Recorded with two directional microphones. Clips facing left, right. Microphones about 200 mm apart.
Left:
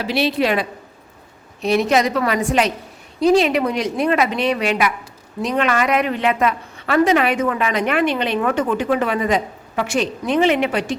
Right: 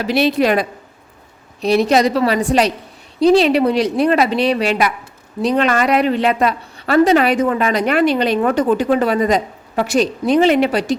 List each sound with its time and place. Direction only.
0.0 s a woman's voice: 45° right (ahead or behind)